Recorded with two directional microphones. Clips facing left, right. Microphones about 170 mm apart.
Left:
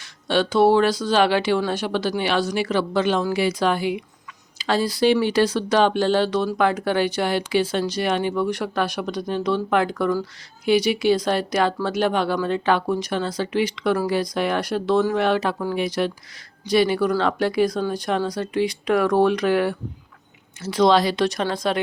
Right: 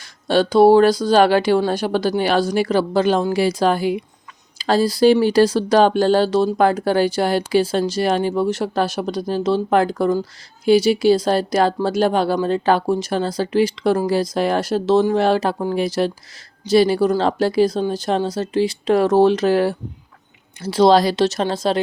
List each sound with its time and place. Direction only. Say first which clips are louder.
0.0 s speech: right 4 dB; 40° right (ahead or behind)